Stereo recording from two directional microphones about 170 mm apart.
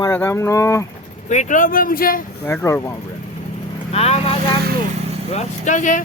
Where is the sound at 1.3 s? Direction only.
45° left (ahead or behind).